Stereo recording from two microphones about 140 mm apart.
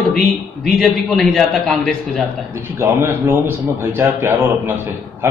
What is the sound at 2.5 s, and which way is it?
A man's voice, 15° right (ahead or behind).